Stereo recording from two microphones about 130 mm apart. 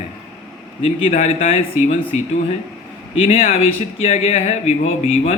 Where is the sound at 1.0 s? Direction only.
70° left (ahead or behind).